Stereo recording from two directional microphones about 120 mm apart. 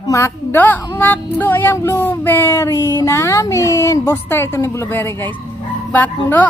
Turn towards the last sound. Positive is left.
turn(degrees=15)  # may be behind; listen again after turning